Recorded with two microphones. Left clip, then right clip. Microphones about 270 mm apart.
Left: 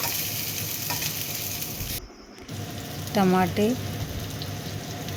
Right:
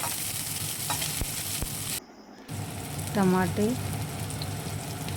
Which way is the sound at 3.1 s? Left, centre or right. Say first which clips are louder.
Left 4 dB; centre.